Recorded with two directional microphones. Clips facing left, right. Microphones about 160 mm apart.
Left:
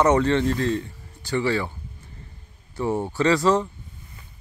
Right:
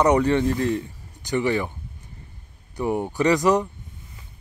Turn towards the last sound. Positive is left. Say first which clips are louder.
# right 1 dB
turn(degrees=-15)  # may be behind; listen again after turning